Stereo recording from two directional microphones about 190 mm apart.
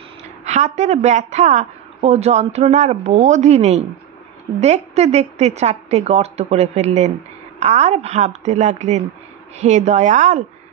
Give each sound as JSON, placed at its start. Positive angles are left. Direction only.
{"t": 0.5, "sound": "speech", "side_deg": -40}